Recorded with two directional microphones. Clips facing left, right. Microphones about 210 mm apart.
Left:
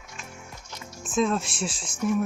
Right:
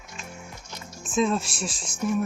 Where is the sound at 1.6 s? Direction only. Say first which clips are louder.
Left 2 dB; 25° left (ahead or behind).